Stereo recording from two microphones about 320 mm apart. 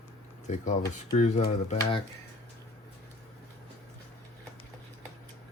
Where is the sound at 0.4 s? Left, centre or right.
Left.